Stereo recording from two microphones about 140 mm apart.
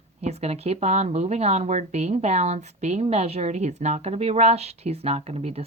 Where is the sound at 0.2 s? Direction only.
50° right (ahead or behind).